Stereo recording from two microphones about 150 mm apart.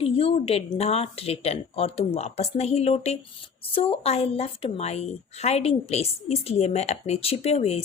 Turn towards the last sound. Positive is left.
turn(degrees=45)  # may be behind; listen again after turning